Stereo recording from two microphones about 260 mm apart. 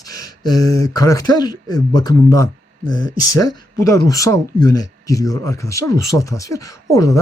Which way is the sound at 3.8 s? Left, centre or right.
Centre.